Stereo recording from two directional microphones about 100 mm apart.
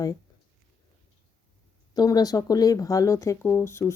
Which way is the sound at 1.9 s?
40° left (ahead or behind).